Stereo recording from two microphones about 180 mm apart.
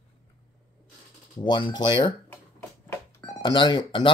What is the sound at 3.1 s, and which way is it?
Speech, 20° left (ahead or behind).